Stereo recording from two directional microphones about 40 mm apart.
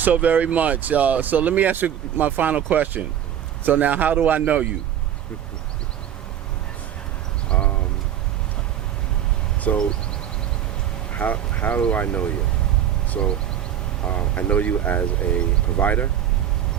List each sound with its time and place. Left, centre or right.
0.0 s a man's voice: right
7.5 s a sound: left
9.7 s speech: left
11.1 s speech: left
13.1 s a sound: left
14.0 s speech: left